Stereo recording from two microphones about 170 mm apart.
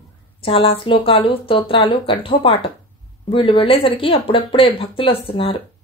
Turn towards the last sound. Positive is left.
turn(degrees=30)  # may be behind; listen again after turning